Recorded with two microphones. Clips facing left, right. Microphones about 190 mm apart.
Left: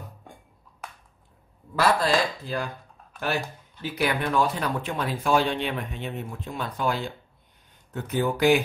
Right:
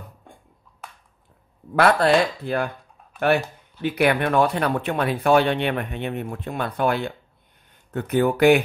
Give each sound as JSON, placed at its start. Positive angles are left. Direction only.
{"t": 1.8, "sound": "speech", "side_deg": -65}
{"t": 3.8, "sound": "speech", "side_deg": -65}